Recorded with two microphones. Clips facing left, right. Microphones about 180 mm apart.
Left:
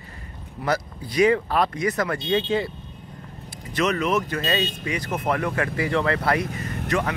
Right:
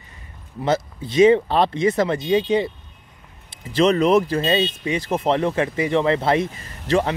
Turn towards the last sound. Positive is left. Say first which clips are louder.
# right 4 dB
turn(degrees=-30)  # may be behind; listen again after turning